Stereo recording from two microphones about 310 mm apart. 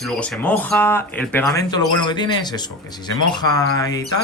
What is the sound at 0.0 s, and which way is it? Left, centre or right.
Speech, centre.